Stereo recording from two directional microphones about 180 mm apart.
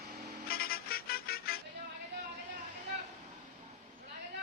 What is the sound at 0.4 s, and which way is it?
Vehicle, 55° left (ahead or behind).